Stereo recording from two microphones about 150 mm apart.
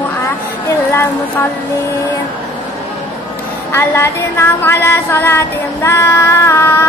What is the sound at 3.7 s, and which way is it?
A woman's voice, 15° left (ahead or behind).